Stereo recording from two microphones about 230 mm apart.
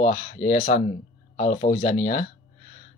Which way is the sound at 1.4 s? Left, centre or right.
Left.